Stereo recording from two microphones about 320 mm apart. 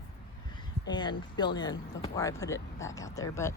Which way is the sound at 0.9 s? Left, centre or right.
Centre.